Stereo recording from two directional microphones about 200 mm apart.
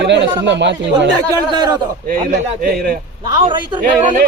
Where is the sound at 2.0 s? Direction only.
45° right (ahead or behind).